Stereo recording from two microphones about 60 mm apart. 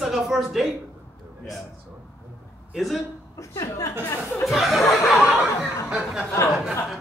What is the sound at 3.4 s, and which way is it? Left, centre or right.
Speech, left.